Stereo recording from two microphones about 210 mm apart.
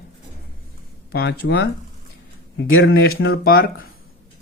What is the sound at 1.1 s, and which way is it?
Speech, 50° left (ahead or behind).